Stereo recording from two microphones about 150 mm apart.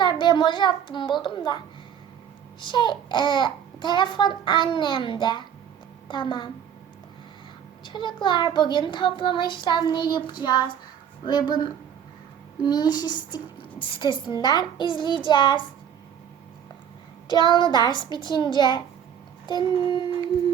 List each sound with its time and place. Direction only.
0.0 s a child's voice: 30° left (ahead or behind)
2.6 s a child's voice: 30° left (ahead or behind)
7.9 s a child's voice: 30° left (ahead or behind)
12.6 s a child's voice: 30° left (ahead or behind)
17.2 s a child's voice: 30° left (ahead or behind)